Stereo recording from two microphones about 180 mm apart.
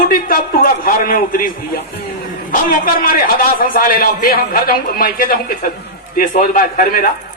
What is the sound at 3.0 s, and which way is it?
Speech, 55° left (ahead or behind).